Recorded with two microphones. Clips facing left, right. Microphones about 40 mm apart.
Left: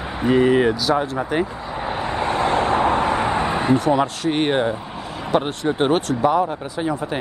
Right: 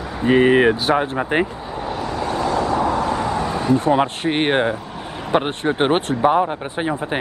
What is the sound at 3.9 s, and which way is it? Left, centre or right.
Speech, right.